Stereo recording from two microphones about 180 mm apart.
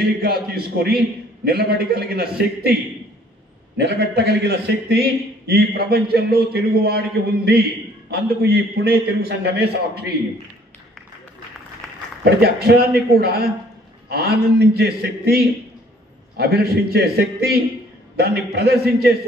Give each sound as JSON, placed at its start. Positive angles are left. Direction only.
{"t": 0.0, "sound": "a man's voice", "side_deg": -60}
{"t": 3.7, "sound": "a man's voice", "side_deg": -70}
{"t": 12.4, "sound": "a man's voice", "side_deg": -60}